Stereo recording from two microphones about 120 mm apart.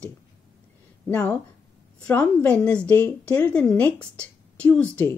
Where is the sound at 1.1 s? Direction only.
15° left (ahead or behind).